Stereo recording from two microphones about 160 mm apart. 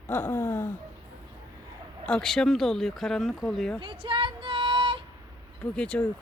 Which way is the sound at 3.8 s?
30° right (ahead or behind).